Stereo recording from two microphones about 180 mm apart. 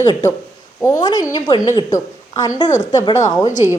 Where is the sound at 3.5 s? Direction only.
45° left (ahead or behind).